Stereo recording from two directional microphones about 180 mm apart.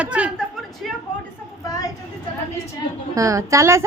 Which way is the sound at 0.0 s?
5° right (ahead or behind).